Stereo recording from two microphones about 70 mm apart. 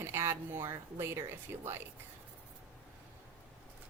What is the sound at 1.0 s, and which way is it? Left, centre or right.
Speech, right.